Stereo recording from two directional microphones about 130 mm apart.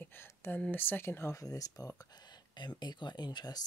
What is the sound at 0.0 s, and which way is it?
Speech, 15° left (ahead or behind).